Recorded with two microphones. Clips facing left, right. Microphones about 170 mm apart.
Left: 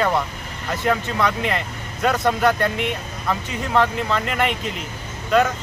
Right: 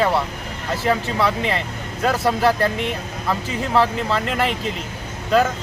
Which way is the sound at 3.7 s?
5° right (ahead or behind).